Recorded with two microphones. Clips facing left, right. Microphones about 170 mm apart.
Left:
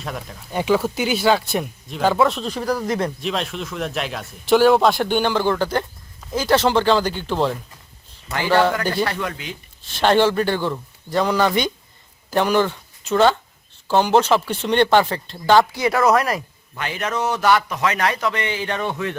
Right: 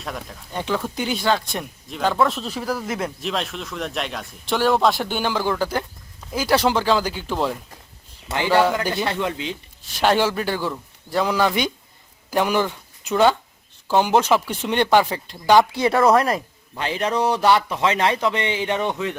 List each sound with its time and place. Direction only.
0.0 s speech: centre (ahead or behind)
8.3 s speech: 20° right (ahead or behind)
9.0 s a man's voice: 20° right (ahead or behind)
9.8 s speech: 10° right (ahead or behind)
15.7 s a man's voice: 25° right (ahead or behind)